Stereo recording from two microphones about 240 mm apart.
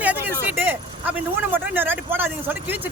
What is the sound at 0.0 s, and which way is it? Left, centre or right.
Vehicle, centre.